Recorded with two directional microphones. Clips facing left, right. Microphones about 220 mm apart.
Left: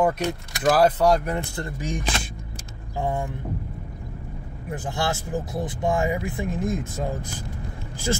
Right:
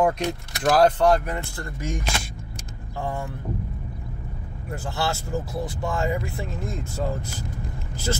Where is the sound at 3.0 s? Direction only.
20° left (ahead or behind).